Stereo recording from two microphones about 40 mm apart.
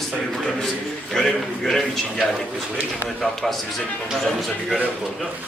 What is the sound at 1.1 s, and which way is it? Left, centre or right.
A man's voice, centre.